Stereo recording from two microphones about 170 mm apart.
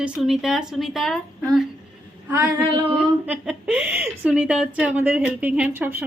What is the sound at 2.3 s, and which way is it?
Female singing, 25° right (ahead or behind).